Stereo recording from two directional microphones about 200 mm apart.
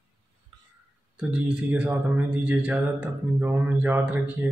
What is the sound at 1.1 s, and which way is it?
Speech, 5° right (ahead or behind).